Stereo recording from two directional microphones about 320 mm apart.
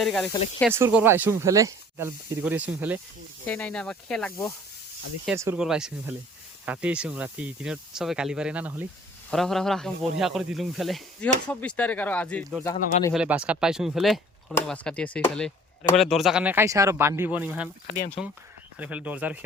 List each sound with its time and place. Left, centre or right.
0.0 s speech: centre
5.2 s speech: centre
12.7 s speech: centre
13.1 s speech: centre
17.8 s speech: left
18.8 s speech: centre